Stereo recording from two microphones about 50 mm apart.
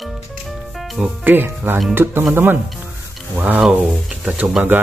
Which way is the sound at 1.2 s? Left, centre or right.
Right.